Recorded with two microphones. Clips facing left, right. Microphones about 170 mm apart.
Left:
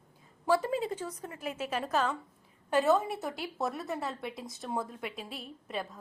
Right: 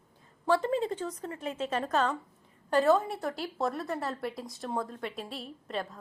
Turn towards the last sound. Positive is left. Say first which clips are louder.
# right 2 dB
turn(degrees=0)  # may be behind; listen again after turning